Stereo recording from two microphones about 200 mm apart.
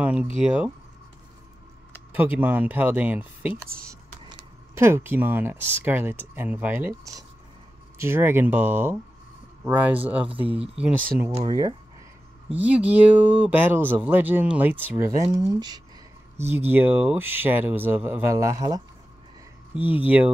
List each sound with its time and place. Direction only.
0.0 s speech: 5° right (ahead or behind)
2.1 s speech: 10° right (ahead or behind)
11.3 s speech: 20° right (ahead or behind)
12.4 s speech: 5° right (ahead or behind)
20.0 s speech: 5° right (ahead or behind)